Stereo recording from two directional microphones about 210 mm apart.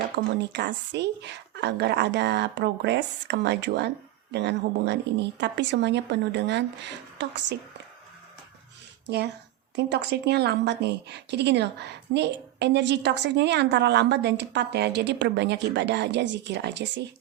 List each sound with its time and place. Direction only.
0.2 s a woman's voice: 55° right (ahead or behind)
9.0 s a woman's voice: 50° right (ahead or behind)